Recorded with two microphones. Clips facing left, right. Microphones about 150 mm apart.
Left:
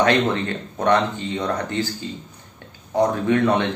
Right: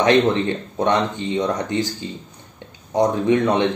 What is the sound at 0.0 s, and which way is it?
Speech, 20° right (ahead or behind).